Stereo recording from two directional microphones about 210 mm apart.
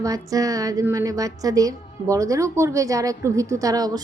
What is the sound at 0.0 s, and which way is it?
A woman's voice, 15° right (ahead or behind).